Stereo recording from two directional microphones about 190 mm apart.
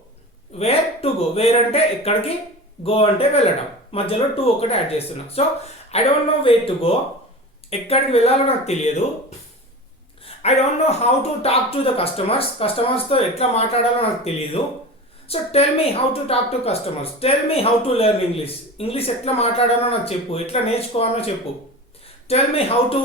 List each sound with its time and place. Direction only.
0.6 s a woman's voice: 30° left (ahead or behind)
10.2 s a woman's voice: 35° left (ahead or behind)
22.3 s a woman's voice: 30° left (ahead or behind)